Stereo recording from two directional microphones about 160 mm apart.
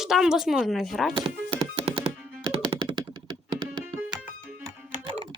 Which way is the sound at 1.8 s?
40° right (ahead or behind).